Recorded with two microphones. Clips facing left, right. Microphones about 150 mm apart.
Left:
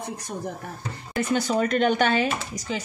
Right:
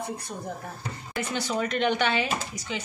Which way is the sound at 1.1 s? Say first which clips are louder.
Left 6 dB; 45° left (ahead or behind).